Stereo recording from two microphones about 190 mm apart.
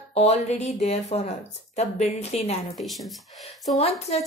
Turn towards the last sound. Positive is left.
turn(degrees=35)  # may be behind; listen again after turning